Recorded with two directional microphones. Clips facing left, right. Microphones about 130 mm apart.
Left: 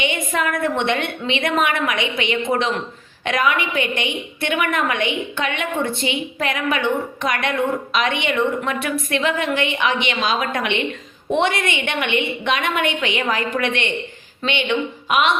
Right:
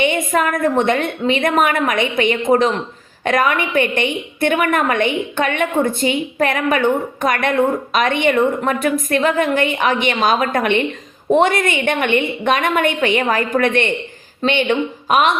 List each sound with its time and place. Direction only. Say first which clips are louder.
0.0 s a woman's voice: right 5 dB; 45° right (ahead or behind)